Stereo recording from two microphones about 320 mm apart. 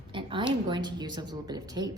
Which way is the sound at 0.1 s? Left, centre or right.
Centre.